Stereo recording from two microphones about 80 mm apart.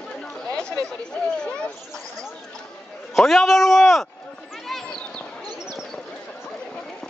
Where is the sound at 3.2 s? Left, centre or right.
Centre.